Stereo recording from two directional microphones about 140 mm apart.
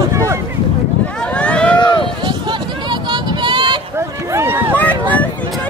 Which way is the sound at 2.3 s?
35° right (ahead or behind).